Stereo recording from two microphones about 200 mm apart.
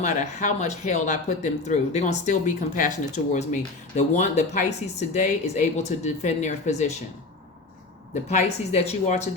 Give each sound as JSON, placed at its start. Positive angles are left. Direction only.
{"t": 0.0, "sound": "speech", "side_deg": 35}
{"t": 8.1, "sound": "speech", "side_deg": 35}